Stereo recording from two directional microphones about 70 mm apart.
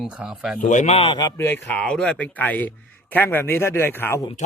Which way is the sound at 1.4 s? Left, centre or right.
Left.